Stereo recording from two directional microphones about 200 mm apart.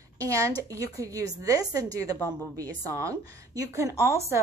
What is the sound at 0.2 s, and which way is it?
A woman's voice, 15° right (ahead or behind).